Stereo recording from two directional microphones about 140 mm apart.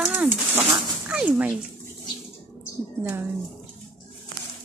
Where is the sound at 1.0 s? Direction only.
10° right (ahead or behind).